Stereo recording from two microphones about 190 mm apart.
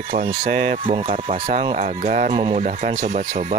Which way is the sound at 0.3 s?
35° right (ahead or behind).